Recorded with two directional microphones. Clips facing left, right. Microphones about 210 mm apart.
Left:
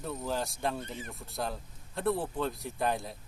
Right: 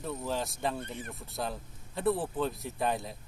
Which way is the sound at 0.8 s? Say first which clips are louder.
Right 1 dB; 60° right (ahead or behind).